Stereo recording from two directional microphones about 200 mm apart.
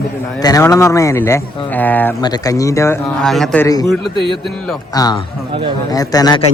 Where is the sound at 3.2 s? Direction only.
Centre (ahead or behind).